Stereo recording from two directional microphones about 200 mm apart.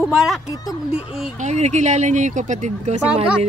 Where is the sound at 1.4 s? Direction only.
35° right (ahead or behind).